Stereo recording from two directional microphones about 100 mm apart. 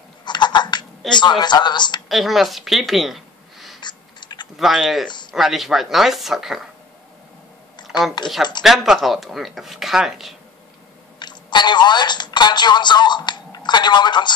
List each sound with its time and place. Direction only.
0.2 s a sound: 50° left (ahead or behind)
1.1 s a woman's voice: 50° left (ahead or behind)
2.0 s a woman's voice: centre (ahead or behind)
3.8 s chewing: 50° left (ahead or behind)
4.6 s speech: 5° right (ahead or behind)
5.0 s a sound: 50° left (ahead or behind)
5.3 s speech: centre (ahead or behind)
8.6 s speech: 5° right (ahead or behind)
11.1 s speech: 50° left (ahead or behind)